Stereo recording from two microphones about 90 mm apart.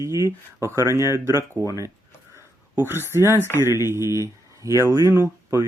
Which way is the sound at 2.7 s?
25° right (ahead or behind).